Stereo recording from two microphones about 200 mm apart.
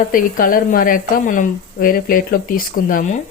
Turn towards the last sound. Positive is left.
turn(degrees=40)  # may be behind; listen again after turning